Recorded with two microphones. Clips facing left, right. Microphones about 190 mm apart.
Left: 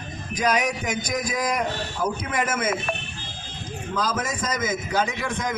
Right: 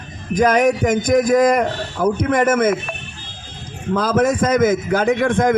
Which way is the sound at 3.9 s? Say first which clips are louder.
Right 11 dB; 55° right (ahead or behind).